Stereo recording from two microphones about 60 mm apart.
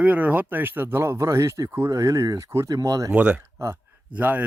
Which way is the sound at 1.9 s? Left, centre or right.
Right.